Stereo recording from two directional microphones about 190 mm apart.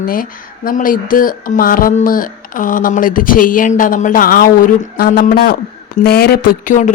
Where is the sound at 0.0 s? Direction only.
50° left (ahead or behind).